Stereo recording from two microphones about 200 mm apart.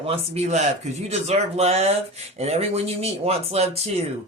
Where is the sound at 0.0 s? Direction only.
30° right (ahead or behind).